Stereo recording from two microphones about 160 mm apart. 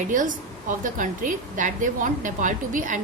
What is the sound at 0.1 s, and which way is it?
A woman's voice, 55° right (ahead or behind).